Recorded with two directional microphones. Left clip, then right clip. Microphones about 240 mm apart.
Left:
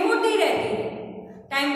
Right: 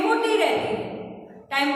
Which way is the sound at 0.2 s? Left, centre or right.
Centre.